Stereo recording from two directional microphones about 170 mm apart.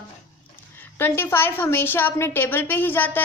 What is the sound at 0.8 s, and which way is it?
A woman's voice, 15° left (ahead or behind).